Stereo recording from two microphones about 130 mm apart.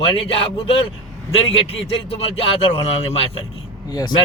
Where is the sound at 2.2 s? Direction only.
50° left (ahead or behind).